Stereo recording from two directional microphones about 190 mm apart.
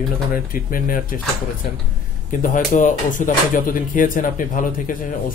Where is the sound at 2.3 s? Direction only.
45° left (ahead or behind).